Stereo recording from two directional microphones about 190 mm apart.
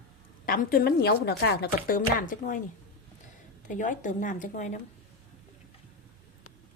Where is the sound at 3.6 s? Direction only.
40° left (ahead or behind).